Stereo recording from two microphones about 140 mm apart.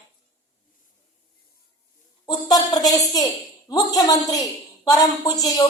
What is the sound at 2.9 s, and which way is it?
A woman's voice, 25° left (ahead or behind).